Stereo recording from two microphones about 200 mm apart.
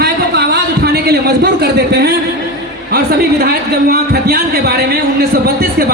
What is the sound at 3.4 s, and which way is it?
A man's voice, 50° right (ahead or behind).